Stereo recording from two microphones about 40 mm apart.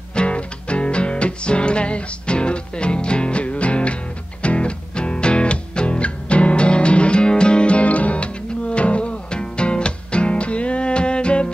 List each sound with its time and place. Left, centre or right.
0.1 s music: left